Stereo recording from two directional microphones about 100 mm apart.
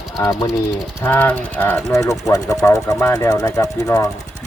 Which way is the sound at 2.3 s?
35° left (ahead or behind).